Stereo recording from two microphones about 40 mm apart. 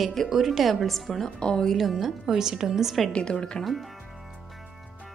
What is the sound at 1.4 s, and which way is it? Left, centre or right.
Speech, left.